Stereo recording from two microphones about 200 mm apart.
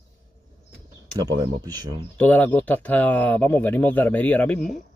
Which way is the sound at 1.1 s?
20° right (ahead or behind).